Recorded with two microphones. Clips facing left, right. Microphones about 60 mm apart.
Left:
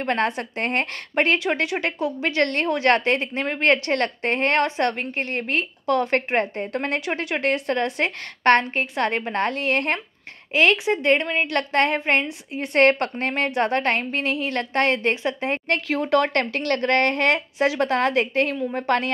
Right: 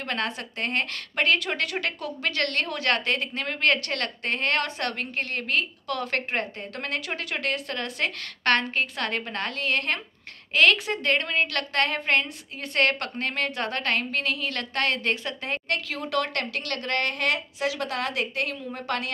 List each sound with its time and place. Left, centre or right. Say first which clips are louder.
0.0 s a woman's voice: left 7 dB; left